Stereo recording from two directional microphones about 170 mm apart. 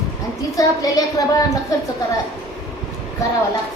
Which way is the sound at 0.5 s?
20° left (ahead or behind).